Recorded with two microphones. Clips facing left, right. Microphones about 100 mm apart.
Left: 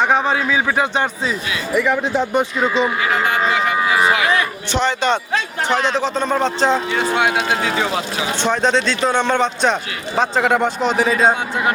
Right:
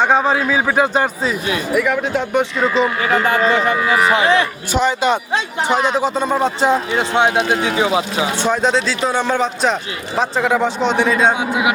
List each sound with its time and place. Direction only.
0.0 s a man's voice: centre (ahead or behind)
3.0 s speech: 40° right (ahead or behind)
4.7 s speech: 5° right (ahead or behind)
6.9 s speech: 25° right (ahead or behind)
8.4 s a man's voice: 5° right (ahead or behind)